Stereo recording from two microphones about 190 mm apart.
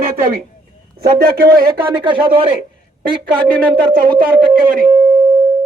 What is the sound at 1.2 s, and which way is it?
Speech, 50° right (ahead or behind).